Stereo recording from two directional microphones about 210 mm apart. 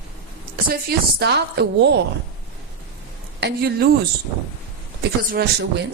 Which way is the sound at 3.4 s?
50° right (ahead or behind).